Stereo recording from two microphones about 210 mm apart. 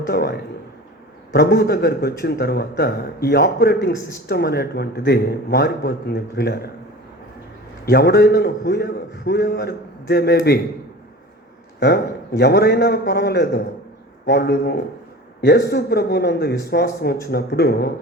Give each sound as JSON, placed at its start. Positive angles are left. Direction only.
{"t": 0.1, "sound": "a man's voice", "side_deg": 50}
{"t": 7.9, "sound": "a man's voice", "side_deg": 45}
{"t": 11.8, "sound": "a man's voice", "side_deg": 50}